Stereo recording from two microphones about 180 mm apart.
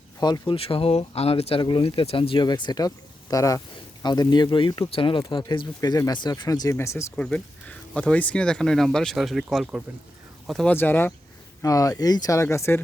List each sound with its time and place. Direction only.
0.2 s speech: 25° left (ahead or behind)